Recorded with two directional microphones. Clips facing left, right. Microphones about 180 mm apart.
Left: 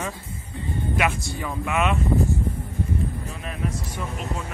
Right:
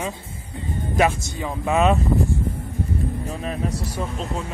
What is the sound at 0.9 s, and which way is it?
Speech, 30° right (ahead or behind).